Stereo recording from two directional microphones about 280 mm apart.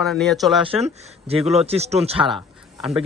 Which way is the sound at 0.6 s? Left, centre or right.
Right.